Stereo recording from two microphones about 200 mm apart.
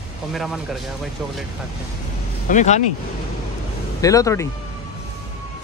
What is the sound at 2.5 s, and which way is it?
Speech, 35° left (ahead or behind).